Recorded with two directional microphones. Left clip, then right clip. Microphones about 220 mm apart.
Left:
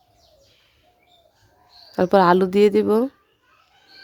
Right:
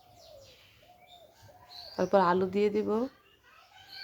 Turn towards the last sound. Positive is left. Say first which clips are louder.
# left 12 dB
turn(degrees=45)  # may be behind; listen again after turning